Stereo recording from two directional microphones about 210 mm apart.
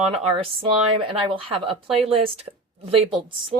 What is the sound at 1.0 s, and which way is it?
A woman's voice, 25° right (ahead or behind).